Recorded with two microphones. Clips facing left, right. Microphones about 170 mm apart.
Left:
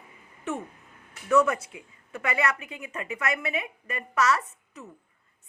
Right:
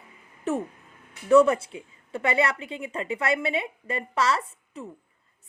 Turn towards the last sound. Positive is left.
turn(degrees=-30)  # may be behind; listen again after turning